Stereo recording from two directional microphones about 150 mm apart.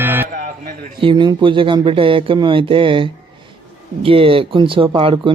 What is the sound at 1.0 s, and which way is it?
Speech, 30° right (ahead or behind).